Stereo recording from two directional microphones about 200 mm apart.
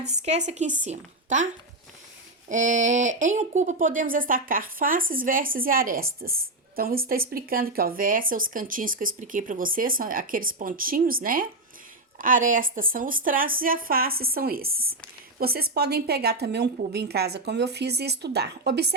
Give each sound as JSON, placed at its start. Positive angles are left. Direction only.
{"t": 0.1, "sound": "a woman's voice", "side_deg": -35}
{"t": 2.5, "sound": "a woman's voice", "side_deg": -40}